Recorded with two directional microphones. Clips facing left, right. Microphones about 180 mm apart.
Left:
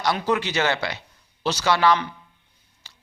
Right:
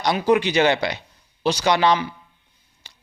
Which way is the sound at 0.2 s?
15° right (ahead or behind).